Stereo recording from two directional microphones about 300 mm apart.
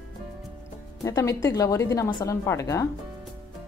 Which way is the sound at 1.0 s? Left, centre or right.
Centre.